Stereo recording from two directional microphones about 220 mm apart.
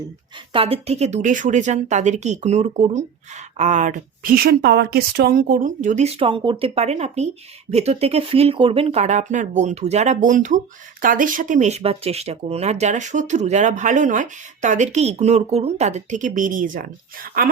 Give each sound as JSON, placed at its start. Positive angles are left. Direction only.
{"t": 0.5, "sound": "speech", "side_deg": -25}